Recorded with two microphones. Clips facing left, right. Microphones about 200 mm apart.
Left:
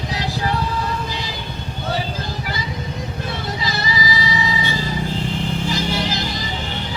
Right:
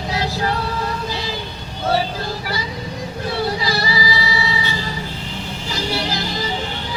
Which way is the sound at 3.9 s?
20° left (ahead or behind).